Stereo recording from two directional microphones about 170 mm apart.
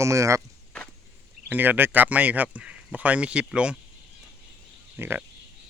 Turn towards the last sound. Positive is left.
turn(degrees=-10)  # may be behind; listen again after turning